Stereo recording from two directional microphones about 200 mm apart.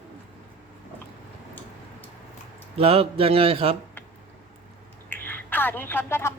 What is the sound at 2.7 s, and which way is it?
Speech, 30° right (ahead or behind).